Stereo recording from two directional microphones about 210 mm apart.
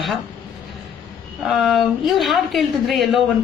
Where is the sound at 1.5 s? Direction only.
Centre (ahead or behind).